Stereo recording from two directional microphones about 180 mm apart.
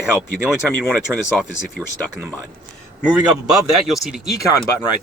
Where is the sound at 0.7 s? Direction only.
5° left (ahead or behind).